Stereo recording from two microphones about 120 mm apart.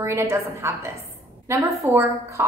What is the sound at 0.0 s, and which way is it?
Speech, 20° right (ahead or behind).